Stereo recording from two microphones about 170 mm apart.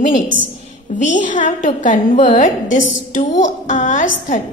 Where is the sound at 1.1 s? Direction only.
50° left (ahead or behind).